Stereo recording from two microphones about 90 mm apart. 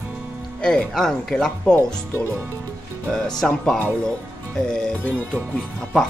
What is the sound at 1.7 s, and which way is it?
Speech, 25° left (ahead or behind).